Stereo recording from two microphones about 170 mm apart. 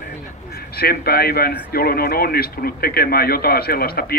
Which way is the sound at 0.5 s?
65° left (ahead or behind).